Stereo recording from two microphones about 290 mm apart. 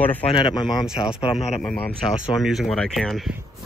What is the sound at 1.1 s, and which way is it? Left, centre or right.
Speech, centre.